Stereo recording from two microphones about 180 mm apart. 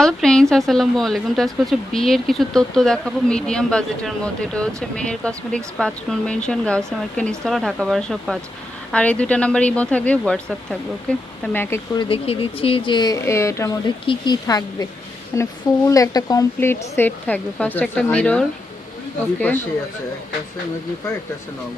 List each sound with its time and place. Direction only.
0.0 s a sound: 5° left (ahead or behind)
0.5 s speech: centre (ahead or behind)
11.9 s speech: 30° left (ahead or behind); by 18.4 s 5° left (ahead or behind)